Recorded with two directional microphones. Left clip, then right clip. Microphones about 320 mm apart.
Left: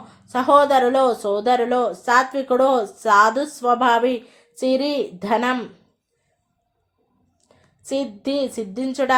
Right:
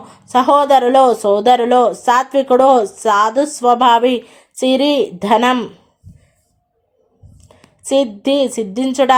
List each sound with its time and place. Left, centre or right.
0.1 s speech: right
7.4 s a woman's voice: right